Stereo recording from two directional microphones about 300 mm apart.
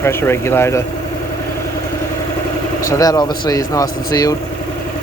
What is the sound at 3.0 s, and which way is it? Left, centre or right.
Speech, centre.